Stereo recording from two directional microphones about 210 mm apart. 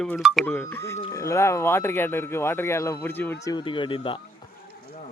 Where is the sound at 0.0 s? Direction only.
Centre (ahead or behind).